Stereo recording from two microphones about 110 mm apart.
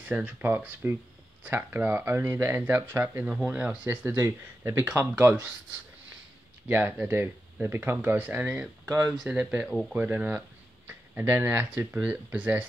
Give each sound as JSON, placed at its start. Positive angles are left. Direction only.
{"t": 0.0, "sound": "speech", "side_deg": -15}
{"t": 6.7, "sound": "speech", "side_deg": -15}
{"t": 9.1, "sound": "speech", "side_deg": -10}